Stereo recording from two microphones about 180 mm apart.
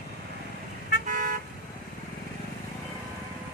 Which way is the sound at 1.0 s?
45° right (ahead or behind).